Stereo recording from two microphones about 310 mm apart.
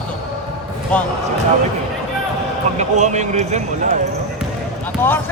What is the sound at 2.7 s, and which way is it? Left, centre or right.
Speech, right.